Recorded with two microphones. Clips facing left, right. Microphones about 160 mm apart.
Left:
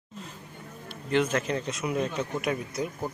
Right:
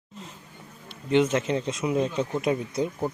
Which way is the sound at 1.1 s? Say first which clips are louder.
Right 4 dB; 25° right (ahead or behind).